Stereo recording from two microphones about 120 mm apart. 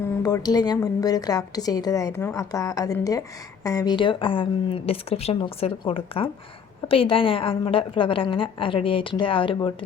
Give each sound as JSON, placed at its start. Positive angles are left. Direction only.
{"t": 0.2, "sound": "a woman's voice", "side_deg": 35}
{"t": 3.9, "sound": "a woman's voice", "side_deg": 45}